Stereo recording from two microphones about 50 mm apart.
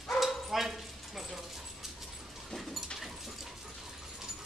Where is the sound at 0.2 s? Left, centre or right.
Centre.